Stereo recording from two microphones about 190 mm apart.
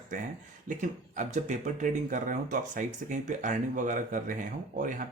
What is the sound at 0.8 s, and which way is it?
Speech, 40° right (ahead or behind).